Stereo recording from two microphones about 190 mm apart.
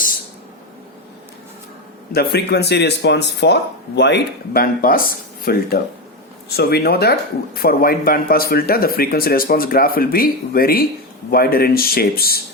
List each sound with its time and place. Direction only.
2.1 s speech: 60° left (ahead or behind)